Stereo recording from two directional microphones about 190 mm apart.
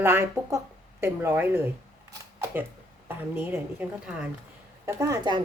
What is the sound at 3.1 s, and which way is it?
A woman's voice, 10° right (ahead or behind).